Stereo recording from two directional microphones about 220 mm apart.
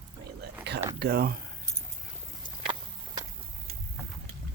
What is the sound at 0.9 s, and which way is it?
Speech, 45° right (ahead or behind).